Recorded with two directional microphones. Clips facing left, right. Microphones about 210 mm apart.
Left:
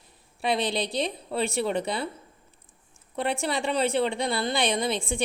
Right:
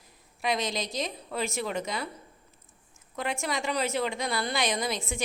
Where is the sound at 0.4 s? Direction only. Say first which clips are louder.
Left 4 dB; 30° left (ahead or behind).